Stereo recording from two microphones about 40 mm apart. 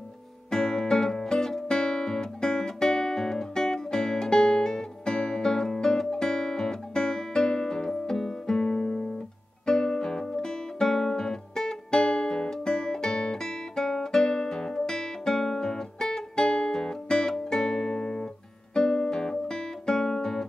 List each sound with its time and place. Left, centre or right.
0.5 s music: centre
9.7 s guitar: centre